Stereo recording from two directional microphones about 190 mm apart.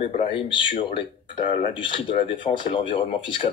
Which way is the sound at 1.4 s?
40° left (ahead or behind).